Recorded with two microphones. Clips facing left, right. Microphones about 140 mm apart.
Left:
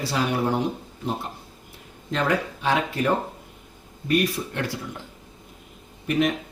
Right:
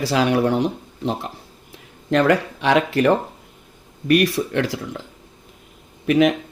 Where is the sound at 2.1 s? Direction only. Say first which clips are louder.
Right 7 dB; 75° right (ahead or behind).